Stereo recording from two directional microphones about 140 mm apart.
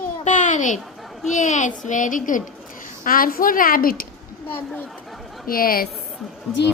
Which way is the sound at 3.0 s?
90° left.